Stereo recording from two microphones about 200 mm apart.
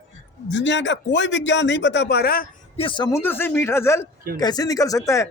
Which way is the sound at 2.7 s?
25° left (ahead or behind).